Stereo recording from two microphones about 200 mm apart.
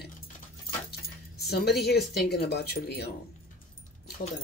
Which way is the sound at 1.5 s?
50° left (ahead or behind).